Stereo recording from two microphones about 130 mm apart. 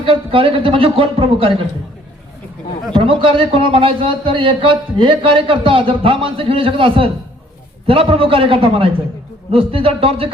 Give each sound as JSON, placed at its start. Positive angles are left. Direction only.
{"t": 0.0, "sound": "a man's voice", "side_deg": -45}
{"t": 2.9, "sound": "a man's voice", "side_deg": -45}